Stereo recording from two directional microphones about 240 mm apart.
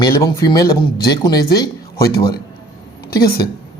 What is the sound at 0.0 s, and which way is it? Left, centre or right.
Speech, centre.